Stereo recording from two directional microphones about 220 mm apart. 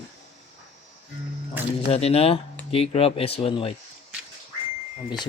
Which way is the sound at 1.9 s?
25° left (ahead or behind).